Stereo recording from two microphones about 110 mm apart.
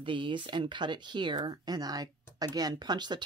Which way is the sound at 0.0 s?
50° right (ahead or behind).